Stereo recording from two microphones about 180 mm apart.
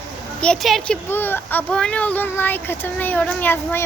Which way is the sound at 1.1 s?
10° left (ahead or behind).